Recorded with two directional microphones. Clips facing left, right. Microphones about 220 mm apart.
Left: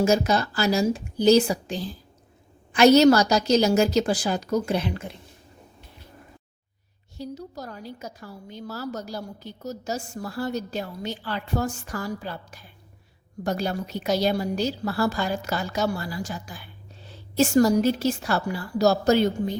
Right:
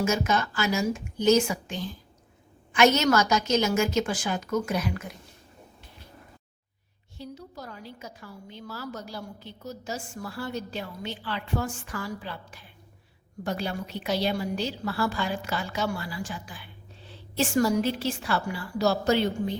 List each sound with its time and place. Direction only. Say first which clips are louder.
0.0 s a woman's voice: left 5 dB; 35° left (ahead or behind)
7.2 s a woman's voice: left 5 dB; 40° left (ahead or behind)